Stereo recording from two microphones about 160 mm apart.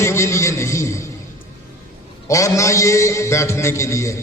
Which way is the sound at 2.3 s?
20° left (ahead or behind).